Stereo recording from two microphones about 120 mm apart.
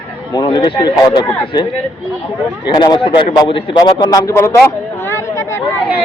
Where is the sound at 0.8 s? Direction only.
35° left (ahead or behind).